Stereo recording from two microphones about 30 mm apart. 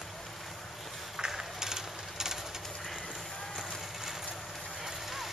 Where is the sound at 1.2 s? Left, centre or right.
Centre.